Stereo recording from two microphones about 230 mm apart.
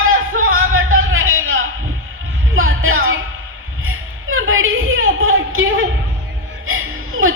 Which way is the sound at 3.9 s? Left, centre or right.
Right.